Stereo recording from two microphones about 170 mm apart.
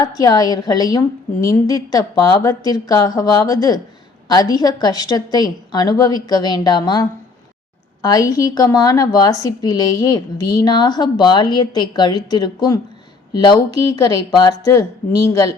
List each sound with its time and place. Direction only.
0.0 s a woman's voice: 20° left (ahead or behind)
15.3 s a woman's voice: 20° left (ahead or behind)